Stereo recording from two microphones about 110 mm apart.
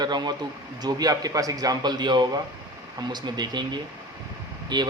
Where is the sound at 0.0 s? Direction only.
40° right (ahead or behind).